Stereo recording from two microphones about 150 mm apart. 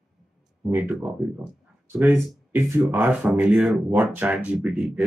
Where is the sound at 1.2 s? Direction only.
Centre (ahead or behind).